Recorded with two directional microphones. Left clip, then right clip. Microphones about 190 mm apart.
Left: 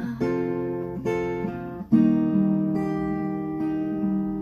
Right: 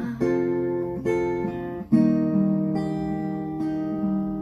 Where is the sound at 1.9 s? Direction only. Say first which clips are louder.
Left 1 dB; 25° left (ahead or behind).